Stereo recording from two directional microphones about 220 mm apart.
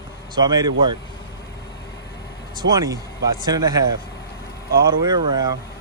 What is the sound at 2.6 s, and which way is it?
Speech, 15° right (ahead or behind).